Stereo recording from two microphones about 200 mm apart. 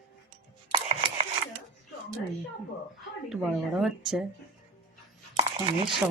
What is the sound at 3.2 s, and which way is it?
A woman's voice, centre (ahead or behind).